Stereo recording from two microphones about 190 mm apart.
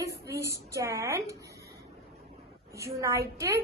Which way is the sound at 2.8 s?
15° right (ahead or behind).